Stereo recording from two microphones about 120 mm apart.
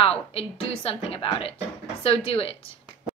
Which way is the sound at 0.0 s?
55° left (ahead or behind).